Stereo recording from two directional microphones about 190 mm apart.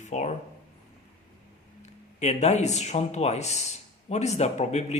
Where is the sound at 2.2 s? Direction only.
35° left (ahead or behind).